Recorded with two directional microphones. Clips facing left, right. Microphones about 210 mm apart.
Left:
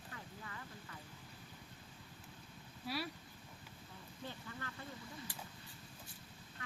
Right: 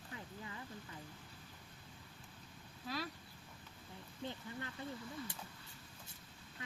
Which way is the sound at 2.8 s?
10° left (ahead or behind).